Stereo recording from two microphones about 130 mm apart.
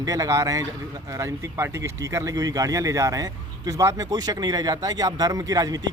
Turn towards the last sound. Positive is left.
turn(degrees=-30)  # may be behind; listen again after turning